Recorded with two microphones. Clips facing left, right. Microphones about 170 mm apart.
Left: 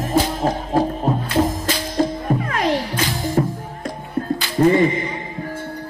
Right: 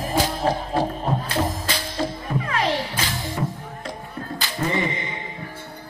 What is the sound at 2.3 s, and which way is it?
Music, 50° left (ahead or behind).